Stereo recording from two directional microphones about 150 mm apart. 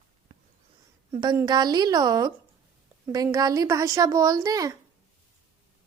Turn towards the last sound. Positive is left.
turn(degrees=-25)  # may be behind; listen again after turning